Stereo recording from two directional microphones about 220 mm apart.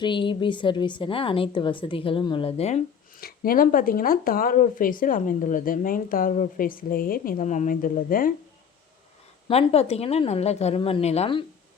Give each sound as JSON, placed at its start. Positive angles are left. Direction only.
{"t": 0.0, "sound": "a woman's voice", "side_deg": 20}
{"t": 9.5, "sound": "a woman's voice", "side_deg": 30}